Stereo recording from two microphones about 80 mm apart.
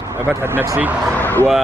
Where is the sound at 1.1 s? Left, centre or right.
Left.